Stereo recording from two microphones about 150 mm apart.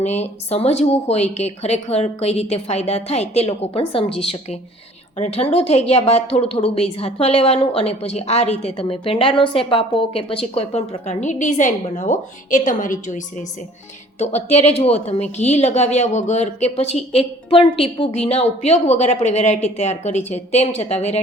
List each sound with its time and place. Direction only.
0.0 s a woman's voice: 45° left (ahead or behind)
14.2 s speech: 45° left (ahead or behind)